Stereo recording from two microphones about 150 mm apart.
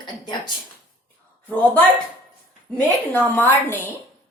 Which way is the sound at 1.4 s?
10° left (ahead or behind).